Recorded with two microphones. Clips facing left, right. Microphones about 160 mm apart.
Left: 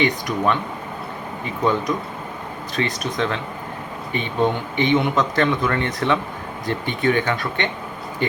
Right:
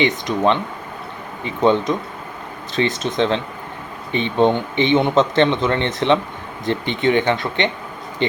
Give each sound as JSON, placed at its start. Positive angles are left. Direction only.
{"t": 0.3, "sound": "speech", "side_deg": -25}
{"t": 1.6, "sound": "speech", "side_deg": -25}